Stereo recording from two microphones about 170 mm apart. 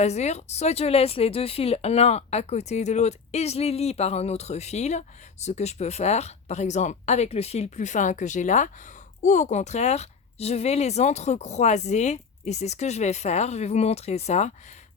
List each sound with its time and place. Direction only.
0.0 s speech: 40° left (ahead or behind)